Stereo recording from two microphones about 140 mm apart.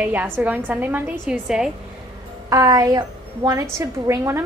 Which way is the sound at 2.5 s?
25° right (ahead or behind).